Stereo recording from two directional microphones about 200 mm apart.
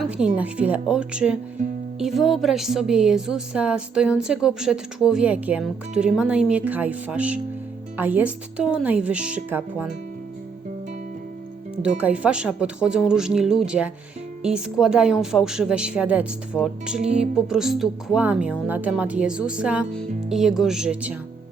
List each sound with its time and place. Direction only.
0.0 s a sound: 5° right (ahead or behind)
0.3 s speech: 5° right (ahead or behind)
1.6 s music: 40° right (ahead or behind)
2.0 s speech: centre (ahead or behind)
11.8 s speech: 5° right (ahead or behind)